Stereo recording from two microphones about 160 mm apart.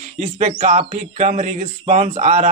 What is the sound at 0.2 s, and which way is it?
Speech, 45° right (ahead or behind).